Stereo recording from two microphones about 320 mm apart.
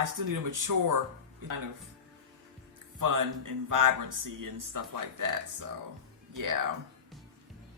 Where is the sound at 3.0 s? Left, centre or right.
Right.